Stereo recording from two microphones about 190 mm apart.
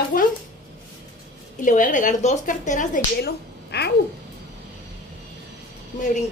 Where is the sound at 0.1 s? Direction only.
50° left (ahead or behind).